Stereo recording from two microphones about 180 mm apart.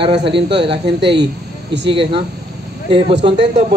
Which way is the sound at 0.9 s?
70° right (ahead or behind).